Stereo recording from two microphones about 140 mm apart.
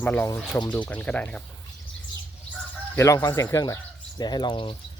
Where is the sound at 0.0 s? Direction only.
10° left (ahead or behind).